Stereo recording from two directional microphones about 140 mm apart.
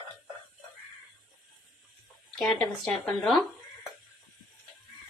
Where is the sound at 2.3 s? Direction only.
5° left (ahead or behind).